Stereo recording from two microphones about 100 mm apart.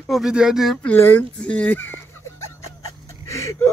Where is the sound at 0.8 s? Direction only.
20° left (ahead or behind).